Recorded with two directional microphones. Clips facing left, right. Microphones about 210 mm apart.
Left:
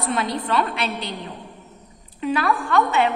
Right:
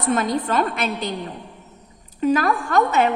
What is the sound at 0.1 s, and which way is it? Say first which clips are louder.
A woman's voice: right 4 dB; 45° right (ahead or behind).